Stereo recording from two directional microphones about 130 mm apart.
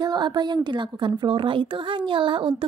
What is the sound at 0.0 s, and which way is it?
A woman's voice, 35° right (ahead or behind).